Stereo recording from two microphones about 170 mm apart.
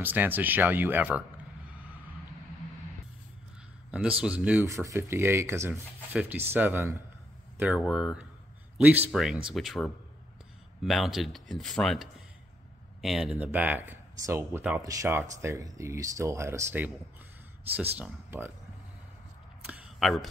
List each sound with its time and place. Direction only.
0.0 s speech: 10° right (ahead or behind)
3.9 s speech: 5° right (ahead or behind)
17.9 s speech: 10° right (ahead or behind)
19.6 s a sound: 5° right (ahead or behind)